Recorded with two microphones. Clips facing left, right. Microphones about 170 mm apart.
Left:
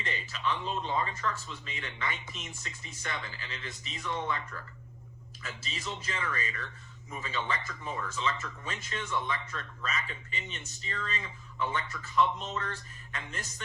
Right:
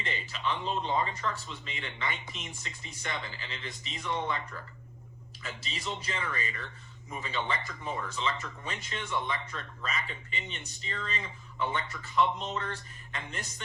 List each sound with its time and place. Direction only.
0.0 s speech: 20° right (ahead or behind)